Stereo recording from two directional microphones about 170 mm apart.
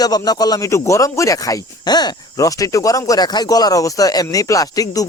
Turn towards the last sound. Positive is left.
turn(degrees=20)  # may be behind; listen again after turning